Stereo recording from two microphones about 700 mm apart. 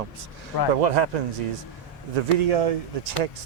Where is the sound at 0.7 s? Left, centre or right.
Right.